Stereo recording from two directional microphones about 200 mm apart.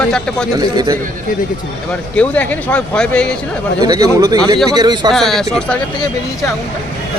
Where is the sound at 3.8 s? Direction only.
15° right (ahead or behind).